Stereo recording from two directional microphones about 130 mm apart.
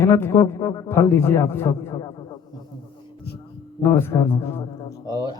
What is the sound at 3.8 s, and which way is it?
A man's voice, 20° left (ahead or behind).